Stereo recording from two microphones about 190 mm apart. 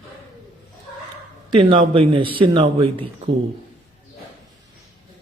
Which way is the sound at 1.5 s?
25° right (ahead or behind).